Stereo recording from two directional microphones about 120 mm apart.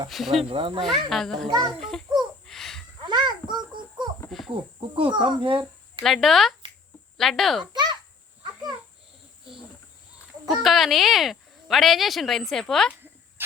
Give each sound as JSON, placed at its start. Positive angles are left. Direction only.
{"t": 0.1, "sound": "speech", "side_deg": 0}
{"t": 0.5, "sound": "speech", "side_deg": -45}
{"t": 1.1, "sound": "speech", "side_deg": 0}
{"t": 1.5, "sound": "a child's voice", "side_deg": -35}
{"t": 1.8, "sound": "speech", "side_deg": 5}
{"t": 2.5, "sound": "a sound", "side_deg": 5}
{"t": 3.0, "sound": "a sound", "side_deg": -40}
{"t": 4.3, "sound": "cricket", "side_deg": 0}
{"t": 4.5, "sound": "speech", "side_deg": -50}
{"t": 6.0, "sound": "speech", "side_deg": 0}
{"t": 7.6, "sound": "a sound", "side_deg": -40}
{"t": 10.5, "sound": "speech", "side_deg": 0}